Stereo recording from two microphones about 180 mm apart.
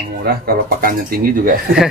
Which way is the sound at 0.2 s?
55° right (ahead or behind).